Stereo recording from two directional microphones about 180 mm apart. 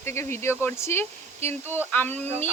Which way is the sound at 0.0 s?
15° left (ahead or behind).